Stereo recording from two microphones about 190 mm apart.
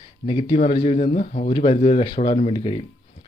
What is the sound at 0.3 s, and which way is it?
Speech, 25° left (ahead or behind).